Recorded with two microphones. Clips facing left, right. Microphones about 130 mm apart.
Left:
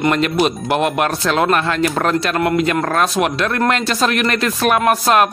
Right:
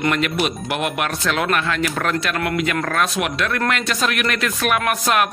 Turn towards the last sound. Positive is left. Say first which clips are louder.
# left 5 dB
turn(degrees=35)  # may be behind; listen again after turning